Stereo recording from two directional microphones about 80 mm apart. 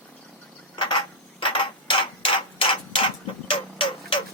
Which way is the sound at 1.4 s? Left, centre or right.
Left.